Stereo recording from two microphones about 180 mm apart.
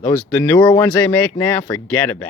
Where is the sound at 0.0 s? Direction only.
10° left (ahead or behind).